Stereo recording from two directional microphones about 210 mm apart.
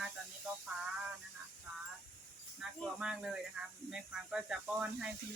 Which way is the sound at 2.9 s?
5° right (ahead or behind).